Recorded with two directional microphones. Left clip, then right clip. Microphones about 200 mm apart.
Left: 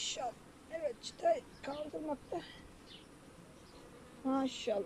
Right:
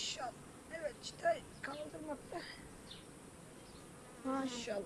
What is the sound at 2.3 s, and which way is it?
Insect, 15° left (ahead or behind).